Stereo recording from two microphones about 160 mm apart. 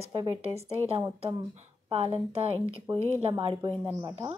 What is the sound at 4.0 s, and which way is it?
Speech, 20° right (ahead or behind).